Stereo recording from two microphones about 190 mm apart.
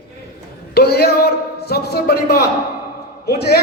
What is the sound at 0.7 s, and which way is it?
A man's voice, 55° left (ahead or behind).